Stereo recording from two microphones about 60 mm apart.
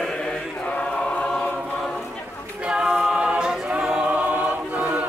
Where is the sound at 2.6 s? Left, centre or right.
Centre.